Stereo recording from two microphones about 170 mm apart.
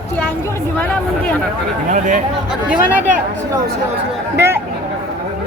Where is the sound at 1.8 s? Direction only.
50° right (ahead or behind).